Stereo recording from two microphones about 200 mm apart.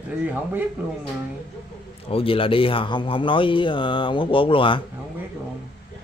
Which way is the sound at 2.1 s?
25° left (ahead or behind).